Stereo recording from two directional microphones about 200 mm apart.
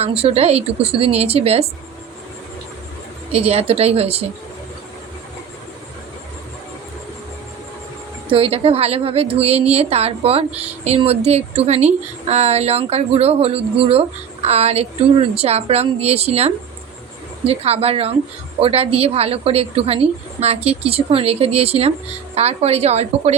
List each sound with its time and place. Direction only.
0.0 s a woman's voice: 30° right (ahead or behind)
3.3 s a woman's voice: 30° right (ahead or behind)
8.3 s a woman's voice: 30° right (ahead or behind)